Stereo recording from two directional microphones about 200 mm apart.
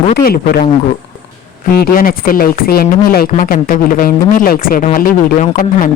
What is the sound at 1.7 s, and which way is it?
A woman's voice, 45° left (ahead or behind).